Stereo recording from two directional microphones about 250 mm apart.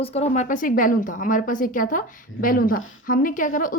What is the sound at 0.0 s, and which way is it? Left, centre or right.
A woman's voice, left.